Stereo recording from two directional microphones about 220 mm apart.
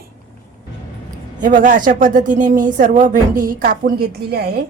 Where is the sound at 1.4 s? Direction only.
35° right (ahead or behind).